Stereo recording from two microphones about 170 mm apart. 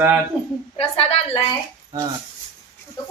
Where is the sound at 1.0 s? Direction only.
35° left (ahead or behind).